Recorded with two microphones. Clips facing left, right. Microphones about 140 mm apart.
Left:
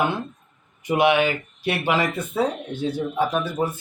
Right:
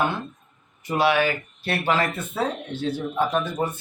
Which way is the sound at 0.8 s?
20° left (ahead or behind).